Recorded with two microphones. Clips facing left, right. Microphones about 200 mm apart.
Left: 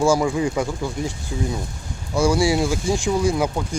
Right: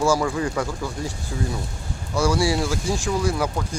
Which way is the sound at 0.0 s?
30° left (ahead or behind).